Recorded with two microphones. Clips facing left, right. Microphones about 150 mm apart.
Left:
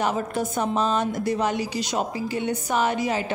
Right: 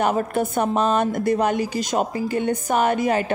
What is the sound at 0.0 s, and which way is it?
A woman's voice, 55° right (ahead or behind).